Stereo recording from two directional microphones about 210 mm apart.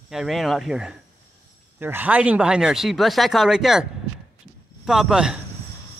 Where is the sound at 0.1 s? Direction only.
Centre (ahead or behind).